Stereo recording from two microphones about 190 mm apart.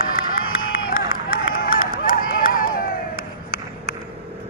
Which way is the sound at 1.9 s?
50° left (ahead or behind).